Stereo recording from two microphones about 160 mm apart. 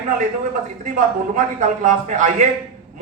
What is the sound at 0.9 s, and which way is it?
Speech, 55° right (ahead or behind).